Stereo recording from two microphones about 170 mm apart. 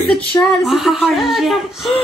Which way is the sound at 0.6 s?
Centre (ahead or behind).